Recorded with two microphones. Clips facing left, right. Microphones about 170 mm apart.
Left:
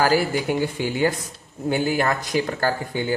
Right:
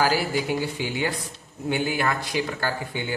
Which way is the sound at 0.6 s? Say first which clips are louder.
Left 5 dB; 45° left (ahead or behind).